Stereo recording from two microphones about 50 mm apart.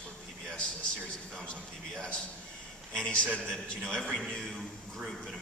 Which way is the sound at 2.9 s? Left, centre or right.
Left.